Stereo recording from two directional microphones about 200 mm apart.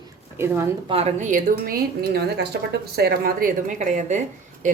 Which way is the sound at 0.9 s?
30° right (ahead or behind).